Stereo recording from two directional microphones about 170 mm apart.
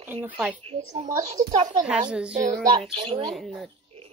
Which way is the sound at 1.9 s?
5° right (ahead or behind).